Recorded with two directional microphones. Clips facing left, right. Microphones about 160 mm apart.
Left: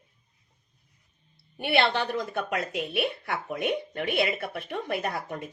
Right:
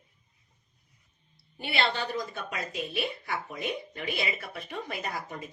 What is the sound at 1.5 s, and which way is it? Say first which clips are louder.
A woman's voice: left 5 dB; 60° left (ahead or behind).